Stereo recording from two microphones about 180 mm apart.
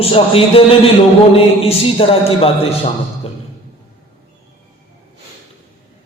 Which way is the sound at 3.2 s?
30° left (ahead or behind).